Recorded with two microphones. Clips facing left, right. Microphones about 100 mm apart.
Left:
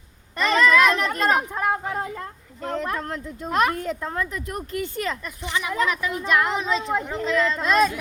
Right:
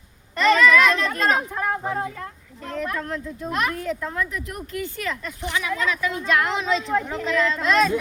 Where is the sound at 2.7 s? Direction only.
30° left (ahead or behind).